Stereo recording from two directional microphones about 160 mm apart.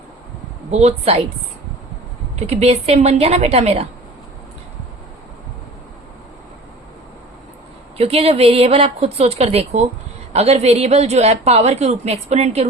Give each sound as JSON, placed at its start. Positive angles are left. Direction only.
{"t": 0.7, "sound": "a woman's voice", "side_deg": -40}
{"t": 2.5, "sound": "a woman's voice", "side_deg": -40}
{"t": 7.9, "sound": "a woman's voice", "side_deg": -40}